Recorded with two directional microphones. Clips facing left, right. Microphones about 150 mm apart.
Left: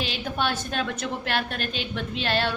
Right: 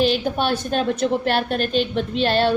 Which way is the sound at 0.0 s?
35° right (ahead or behind).